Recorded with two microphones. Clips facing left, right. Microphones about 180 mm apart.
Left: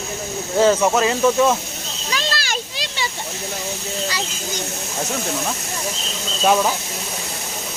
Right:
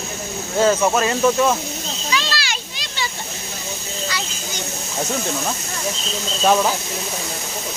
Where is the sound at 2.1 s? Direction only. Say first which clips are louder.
Even; 45° left (ahead or behind).